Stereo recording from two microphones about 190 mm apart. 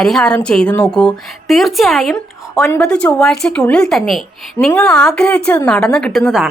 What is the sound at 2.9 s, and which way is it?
A woman's voice, 5° left (ahead or behind).